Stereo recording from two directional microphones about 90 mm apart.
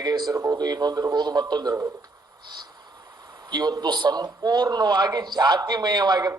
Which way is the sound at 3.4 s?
45° right (ahead or behind).